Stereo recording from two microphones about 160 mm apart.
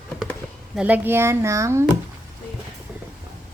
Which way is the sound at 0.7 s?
10° right (ahead or behind).